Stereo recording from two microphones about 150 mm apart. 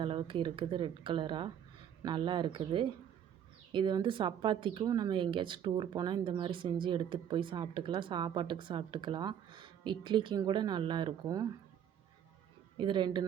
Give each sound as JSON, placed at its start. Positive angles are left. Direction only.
{"t": 0.0, "sound": "speech", "side_deg": -35}
{"t": 12.7, "sound": "speech", "side_deg": -30}